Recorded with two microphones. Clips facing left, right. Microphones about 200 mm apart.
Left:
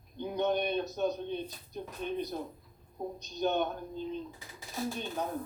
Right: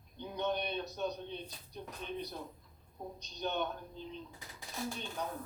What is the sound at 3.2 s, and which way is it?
Speech, 45° left (ahead or behind).